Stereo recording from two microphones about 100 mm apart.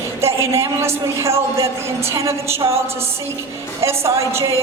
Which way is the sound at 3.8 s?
30° right (ahead or behind).